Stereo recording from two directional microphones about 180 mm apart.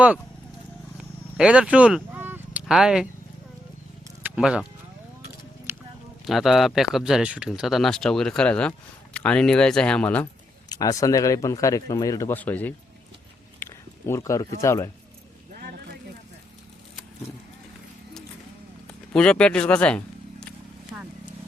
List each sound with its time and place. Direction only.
1.4 s speech: 5° right (ahead or behind)
4.2 s sheep: 5° right (ahead or behind)
5.7 s a sound: 15° right (ahead or behind)
6.2 s speech: centre (ahead or behind)
10.7 s speech: 20° left (ahead or behind)
13.6 s a sound: 15° left (ahead or behind)
14.6 s speech: 15° left (ahead or behind)
19.1 s speech: 5° left (ahead or behind)